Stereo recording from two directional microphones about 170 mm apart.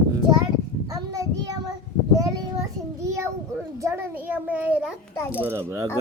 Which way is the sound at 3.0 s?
15° right (ahead or behind).